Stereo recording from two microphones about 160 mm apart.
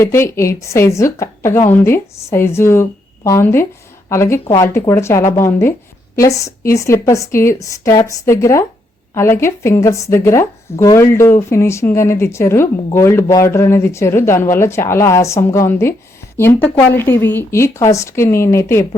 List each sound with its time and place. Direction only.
0.0 s a woman's voice: 15° left (ahead or behind)